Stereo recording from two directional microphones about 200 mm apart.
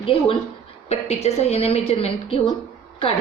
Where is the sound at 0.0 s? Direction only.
25° left (ahead or behind).